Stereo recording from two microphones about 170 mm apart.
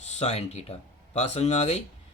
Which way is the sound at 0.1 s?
40° left (ahead or behind).